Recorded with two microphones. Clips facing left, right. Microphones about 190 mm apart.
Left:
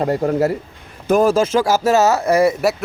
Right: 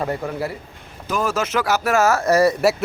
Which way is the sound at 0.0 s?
40° left (ahead or behind).